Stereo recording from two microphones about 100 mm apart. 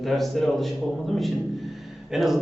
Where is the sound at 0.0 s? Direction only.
Centre (ahead or behind).